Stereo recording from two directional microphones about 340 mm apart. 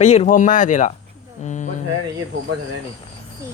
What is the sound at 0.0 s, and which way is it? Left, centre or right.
Speech, centre.